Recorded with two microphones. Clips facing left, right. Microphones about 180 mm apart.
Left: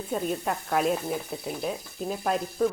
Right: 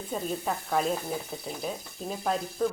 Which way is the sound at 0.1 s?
Centre (ahead or behind).